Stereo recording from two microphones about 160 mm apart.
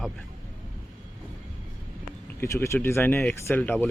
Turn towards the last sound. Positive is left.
turn(degrees=10)  # may be behind; listen again after turning